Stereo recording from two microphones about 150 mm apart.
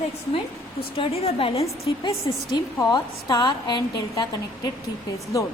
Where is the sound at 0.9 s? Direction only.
40° left (ahead or behind).